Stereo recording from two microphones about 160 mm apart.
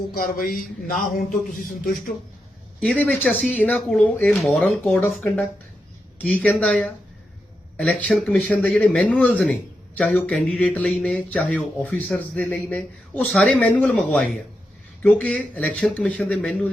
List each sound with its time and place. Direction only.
0.1 s speech: 60° left (ahead or behind)
2.8 s speech: 10° left (ahead or behind)